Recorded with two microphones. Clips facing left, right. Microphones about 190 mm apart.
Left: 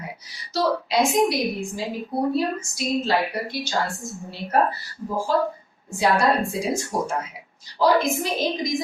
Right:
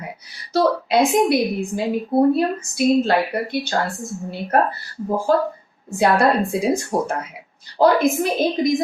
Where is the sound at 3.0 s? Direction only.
55° right (ahead or behind).